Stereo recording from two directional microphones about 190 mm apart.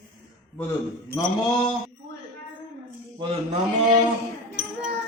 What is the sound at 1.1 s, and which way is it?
Mantra, 20° left (ahead or behind).